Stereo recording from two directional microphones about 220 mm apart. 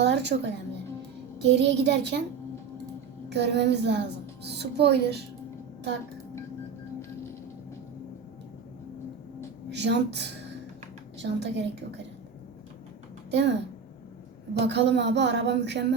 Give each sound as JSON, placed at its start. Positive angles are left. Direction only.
{"t": 0.0, "sound": "a woman's voice", "side_deg": -50}
{"t": 3.2, "sound": "a woman's voice", "side_deg": -50}
{"t": 9.6, "sound": "a woman's voice", "side_deg": -50}
{"t": 13.3, "sound": "a woman's voice", "side_deg": -50}
{"t": 14.6, "sound": "a woman's voice", "side_deg": -50}